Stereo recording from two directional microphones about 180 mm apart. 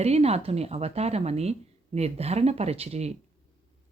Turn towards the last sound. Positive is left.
turn(degrees=-35)  # may be behind; listen again after turning